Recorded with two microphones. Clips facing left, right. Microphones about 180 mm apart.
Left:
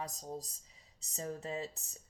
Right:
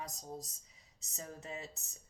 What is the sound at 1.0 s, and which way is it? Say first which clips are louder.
Speech: left 7 dB; 30° left (ahead or behind).